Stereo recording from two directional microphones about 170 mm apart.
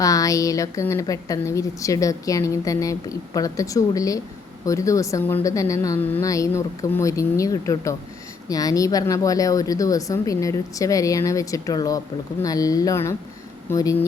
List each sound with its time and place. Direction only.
0.0 s a woman's voice: 20° left (ahead or behind)